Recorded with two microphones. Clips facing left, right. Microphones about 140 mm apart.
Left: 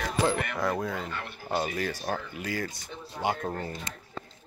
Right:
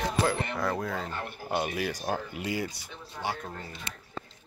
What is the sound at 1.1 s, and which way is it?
Speech, 35° right (ahead or behind).